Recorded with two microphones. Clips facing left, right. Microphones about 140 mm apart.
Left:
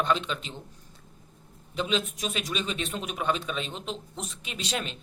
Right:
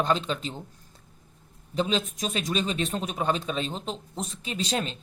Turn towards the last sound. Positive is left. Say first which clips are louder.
# right 4 dB
turn(degrees=-35)  # may be behind; listen again after turning